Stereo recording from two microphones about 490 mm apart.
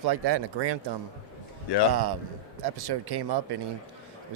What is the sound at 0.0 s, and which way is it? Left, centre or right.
Speech, right.